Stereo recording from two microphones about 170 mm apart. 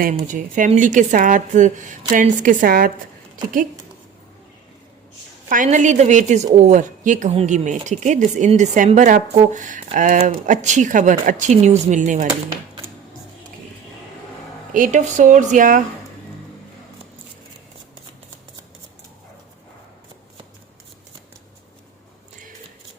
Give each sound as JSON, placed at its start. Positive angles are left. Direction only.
{"t": 0.3, "sound": "a woman's voice", "side_deg": -50}
{"t": 5.5, "sound": "a woman's voice", "side_deg": -50}
{"t": 14.7, "sound": "a woman's voice", "side_deg": -50}